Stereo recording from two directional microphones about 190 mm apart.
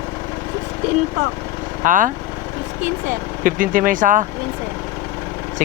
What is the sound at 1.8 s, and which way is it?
Speech, 45° right (ahead or behind).